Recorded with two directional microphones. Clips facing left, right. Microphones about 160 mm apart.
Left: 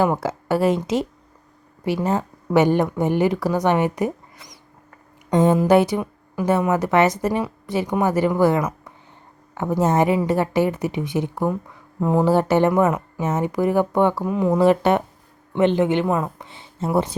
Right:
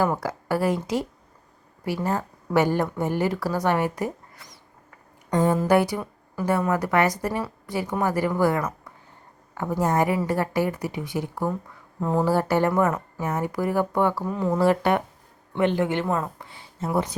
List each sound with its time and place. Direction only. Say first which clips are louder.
0.0 s a woman's voice: left 4 dB; 25° left (ahead or behind)